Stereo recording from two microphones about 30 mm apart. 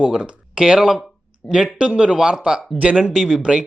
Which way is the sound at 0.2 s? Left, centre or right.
Right.